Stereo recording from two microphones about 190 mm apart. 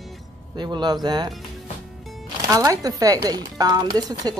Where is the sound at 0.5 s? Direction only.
25° right (ahead or behind).